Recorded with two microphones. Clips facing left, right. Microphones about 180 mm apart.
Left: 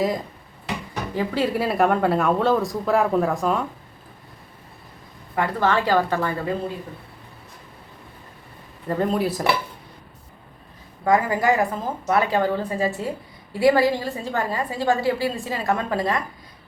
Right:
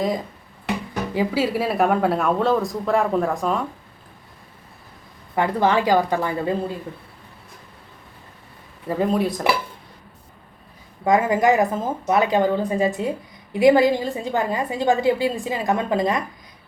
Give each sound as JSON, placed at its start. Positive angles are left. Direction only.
{"t": 1.1, "sound": "speech", "side_deg": -10}
{"t": 5.3, "sound": "a woman's voice", "side_deg": -20}
{"t": 8.9, "sound": "speech", "side_deg": 0}
{"t": 11.0, "sound": "a woman's voice", "side_deg": -20}